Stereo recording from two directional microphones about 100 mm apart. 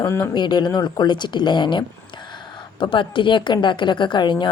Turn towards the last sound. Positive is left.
turn(degrees=50)  # may be behind; listen again after turning